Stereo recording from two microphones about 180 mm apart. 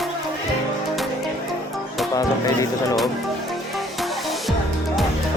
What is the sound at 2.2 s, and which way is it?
Speech, 20° left (ahead or behind).